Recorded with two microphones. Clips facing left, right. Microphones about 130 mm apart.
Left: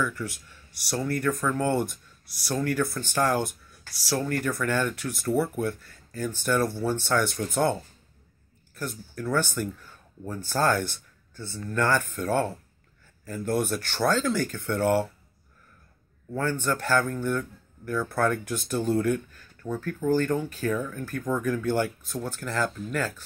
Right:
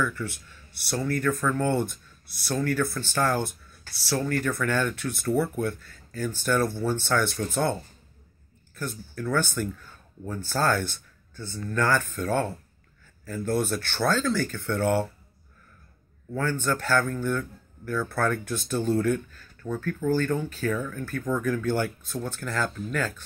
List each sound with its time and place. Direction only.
0.0 s speech: 10° left (ahead or behind)
8.7 s speech: 10° left (ahead or behind)
10.8 s a sound: 5° left (ahead or behind)
11.5 s speech: 10° left (ahead or behind)
16.3 s speech: 10° left (ahead or behind)